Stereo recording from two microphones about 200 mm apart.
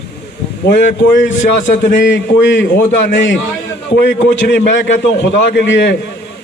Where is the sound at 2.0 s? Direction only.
60° left (ahead or behind).